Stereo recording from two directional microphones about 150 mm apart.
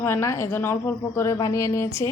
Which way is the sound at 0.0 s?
15° left (ahead or behind).